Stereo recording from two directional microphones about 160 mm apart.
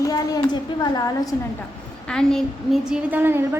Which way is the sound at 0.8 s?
25° left (ahead or behind).